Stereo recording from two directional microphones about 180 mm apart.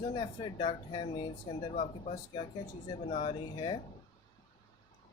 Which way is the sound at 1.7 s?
40° left (ahead or behind).